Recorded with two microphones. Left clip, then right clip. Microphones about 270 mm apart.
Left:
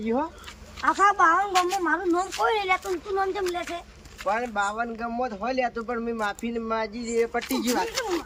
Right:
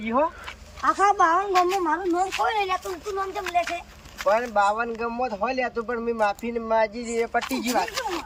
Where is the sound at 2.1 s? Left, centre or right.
Centre.